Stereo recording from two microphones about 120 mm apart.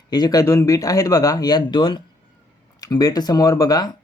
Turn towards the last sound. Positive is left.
turn(degrees=30)  # may be behind; listen again after turning